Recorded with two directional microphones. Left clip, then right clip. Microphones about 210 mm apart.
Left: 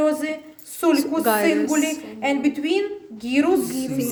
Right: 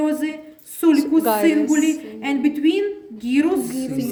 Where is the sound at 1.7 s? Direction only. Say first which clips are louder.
Right 3 dB; 30° left (ahead or behind).